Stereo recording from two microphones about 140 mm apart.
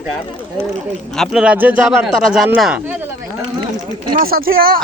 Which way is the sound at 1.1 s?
Centre (ahead or behind).